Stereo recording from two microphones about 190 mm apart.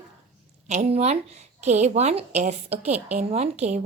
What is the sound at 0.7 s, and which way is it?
Speech, 35° right (ahead or behind).